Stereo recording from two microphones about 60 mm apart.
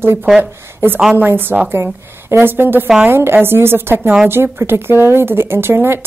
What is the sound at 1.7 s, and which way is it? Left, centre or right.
A woman's voice, right.